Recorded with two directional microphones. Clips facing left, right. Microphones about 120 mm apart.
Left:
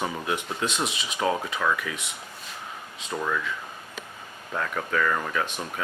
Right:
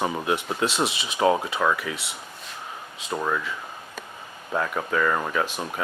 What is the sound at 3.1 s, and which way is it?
Speech, 25° right (ahead or behind).